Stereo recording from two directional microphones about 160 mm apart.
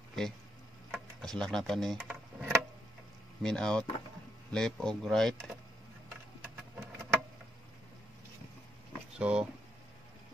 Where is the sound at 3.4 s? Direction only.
5° left (ahead or behind).